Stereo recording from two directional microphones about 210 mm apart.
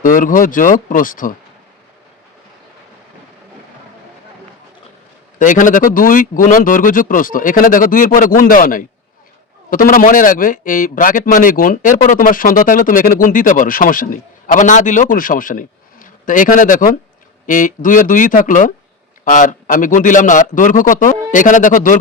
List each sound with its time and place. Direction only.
0.0 s a man's voice: 40° left (ahead or behind)
5.4 s a man's voice: 40° left (ahead or behind)